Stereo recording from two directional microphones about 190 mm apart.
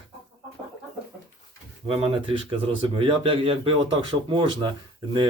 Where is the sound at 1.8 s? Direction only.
25° right (ahead or behind).